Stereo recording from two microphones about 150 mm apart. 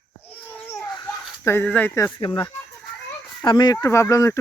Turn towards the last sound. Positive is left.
turn(degrees=20)  # may be behind; listen again after turning